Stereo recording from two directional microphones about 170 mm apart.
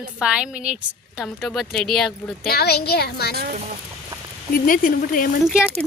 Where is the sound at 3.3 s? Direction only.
65° right (ahead or behind).